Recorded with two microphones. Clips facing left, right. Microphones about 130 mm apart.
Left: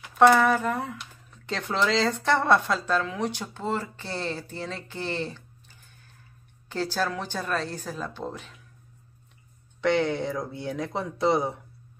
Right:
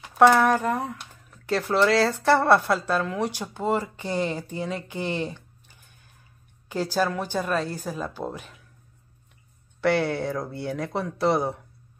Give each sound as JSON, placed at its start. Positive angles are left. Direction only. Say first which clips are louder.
{"t": 0.2, "sound": "speech", "louder": "right 1 dB", "side_deg": -10}
{"t": 9.8, "sound": "speech", "louder": "right 1 dB", "side_deg": -5}